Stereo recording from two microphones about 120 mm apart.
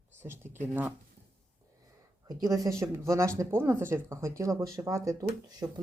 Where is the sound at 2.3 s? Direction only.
30° right (ahead or behind).